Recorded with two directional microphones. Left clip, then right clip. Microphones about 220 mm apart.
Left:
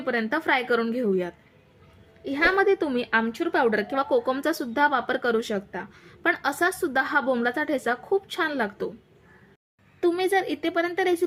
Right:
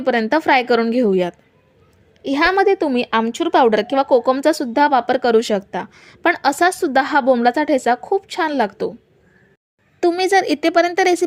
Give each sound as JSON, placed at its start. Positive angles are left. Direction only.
{"t": 0.0, "sound": "a woman's voice", "side_deg": -30}
{"t": 10.0, "sound": "a woman's voice", "side_deg": -35}